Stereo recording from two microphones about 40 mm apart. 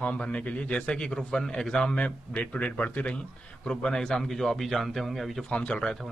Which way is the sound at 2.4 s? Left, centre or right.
Left.